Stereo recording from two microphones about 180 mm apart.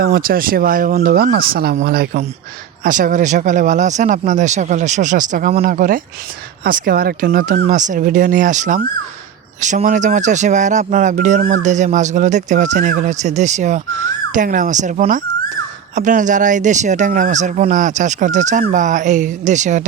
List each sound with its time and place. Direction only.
0.0 s speech: 55° right (ahead or behind)
1.1 s speech: 55° right (ahead or behind); by 19.8 s 40° right (ahead or behind)